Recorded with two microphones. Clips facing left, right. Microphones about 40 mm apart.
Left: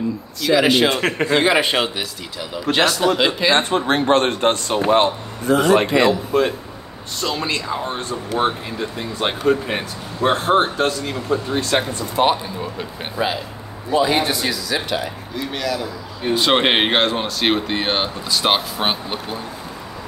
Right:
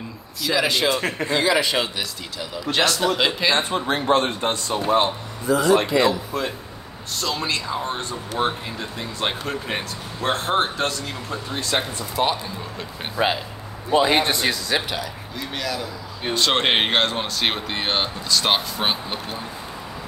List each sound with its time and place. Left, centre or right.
0.6 s a man's voice: left
2.7 s speech: centre
3.5 s speech: left
7.2 s speech: left
8.5 s speech: centre
11.7 s speech: left
13.2 s a man's voice: right
14.9 s speech: centre
16.3 s speech: centre